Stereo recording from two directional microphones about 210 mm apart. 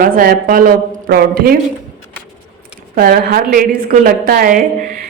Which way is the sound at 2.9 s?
45° right (ahead or behind).